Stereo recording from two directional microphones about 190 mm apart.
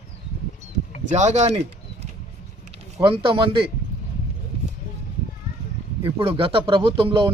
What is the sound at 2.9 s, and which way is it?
Speech, 25° right (ahead or behind).